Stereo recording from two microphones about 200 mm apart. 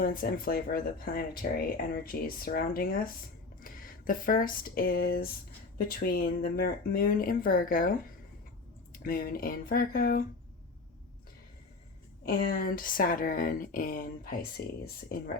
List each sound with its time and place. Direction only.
0.0 s speech: 45° left (ahead or behind)
12.2 s speech: 45° left (ahead or behind)